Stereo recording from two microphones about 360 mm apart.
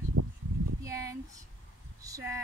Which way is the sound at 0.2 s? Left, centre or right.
Right.